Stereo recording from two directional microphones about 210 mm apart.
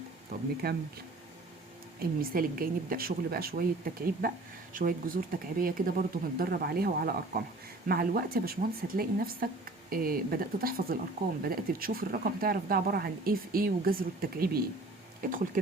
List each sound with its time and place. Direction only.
0.6 s speech: 45° right (ahead or behind)
2.0 s speech: 45° right (ahead or behind)